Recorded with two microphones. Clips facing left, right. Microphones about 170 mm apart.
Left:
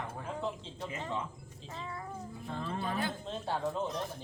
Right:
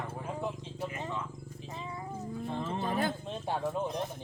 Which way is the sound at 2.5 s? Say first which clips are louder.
Right 2 dB; 20° right (ahead or behind).